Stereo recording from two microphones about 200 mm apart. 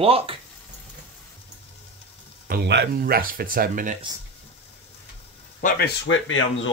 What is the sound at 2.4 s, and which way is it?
Speech, 55° right (ahead or behind).